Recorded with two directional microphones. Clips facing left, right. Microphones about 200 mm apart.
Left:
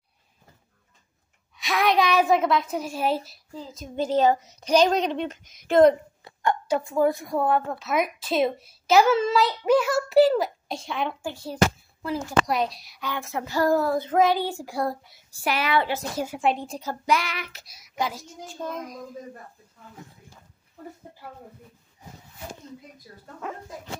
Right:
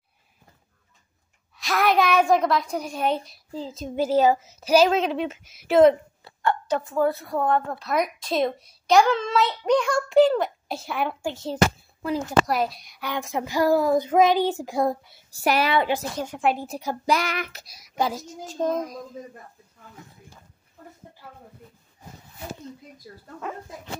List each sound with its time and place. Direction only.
1.6 s a woman's voice: centre (ahead or behind)
3.5 s speech: 30° right (ahead or behind)
3.9 s child singing: 10° right (ahead or behind)
6.2 s a woman's voice: 15° left (ahead or behind); by 11.3 s 5° right (ahead or behind)
11.3 s speech: 20° right (ahead or behind)
12.4 s a woman's voice: centre (ahead or behind)
13.0 s child singing: 15° right (ahead or behind)
15.3 s speech: 40° right (ahead or behind)
15.7 s child singing: 15° right (ahead or behind)
16.2 s a woman's voice: 5° left (ahead or behind)
17.0 s speech: 40° right (ahead or behind)